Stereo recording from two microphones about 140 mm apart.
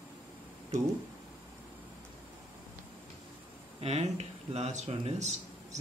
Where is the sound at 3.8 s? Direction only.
50° right (ahead or behind).